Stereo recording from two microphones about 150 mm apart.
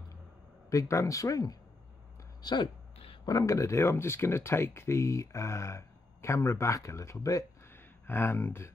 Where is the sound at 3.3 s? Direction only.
20° left (ahead or behind).